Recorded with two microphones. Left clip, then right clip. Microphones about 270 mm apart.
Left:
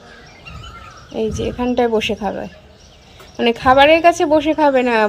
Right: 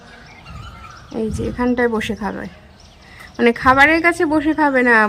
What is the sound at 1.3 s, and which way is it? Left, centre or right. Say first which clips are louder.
Speech: even; right.